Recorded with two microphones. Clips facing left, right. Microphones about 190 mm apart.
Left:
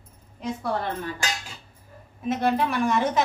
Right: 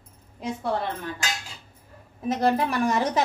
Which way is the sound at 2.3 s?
40° right (ahead or behind).